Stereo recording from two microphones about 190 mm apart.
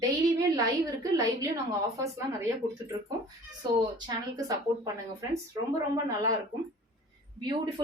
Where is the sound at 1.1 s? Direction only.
20° right (ahead or behind).